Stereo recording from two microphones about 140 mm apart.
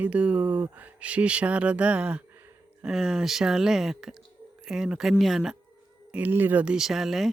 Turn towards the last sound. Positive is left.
turn(degrees=0)  # may be behind; listen again after turning